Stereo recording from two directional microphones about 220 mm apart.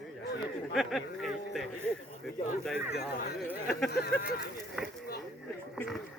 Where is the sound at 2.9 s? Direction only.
50° left (ahead or behind).